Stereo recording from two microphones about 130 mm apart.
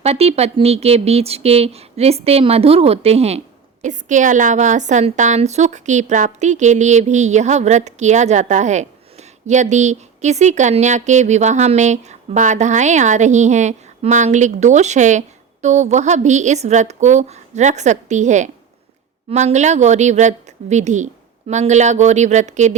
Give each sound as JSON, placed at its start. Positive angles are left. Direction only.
{"t": 0.0, "sound": "speech", "side_deg": -50}
{"t": 3.8, "sound": "a woman's voice", "side_deg": -70}